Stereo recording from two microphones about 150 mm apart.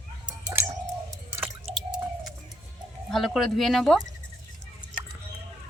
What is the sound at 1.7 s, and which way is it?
Drip, 45° right (ahead or behind).